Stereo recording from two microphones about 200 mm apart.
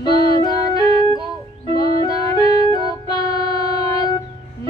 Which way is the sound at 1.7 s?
20° left (ahead or behind).